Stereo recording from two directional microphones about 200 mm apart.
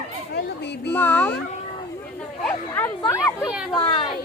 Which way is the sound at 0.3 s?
60° left (ahead or behind).